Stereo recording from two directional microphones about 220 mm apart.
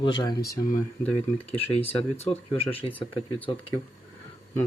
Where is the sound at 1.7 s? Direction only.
25° left (ahead or behind).